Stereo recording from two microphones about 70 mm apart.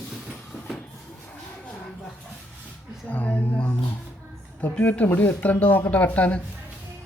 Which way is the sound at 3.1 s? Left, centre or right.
Left.